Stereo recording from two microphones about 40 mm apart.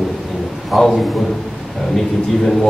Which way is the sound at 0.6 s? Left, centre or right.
Centre.